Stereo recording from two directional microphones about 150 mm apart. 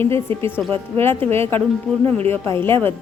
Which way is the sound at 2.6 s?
15° left (ahead or behind).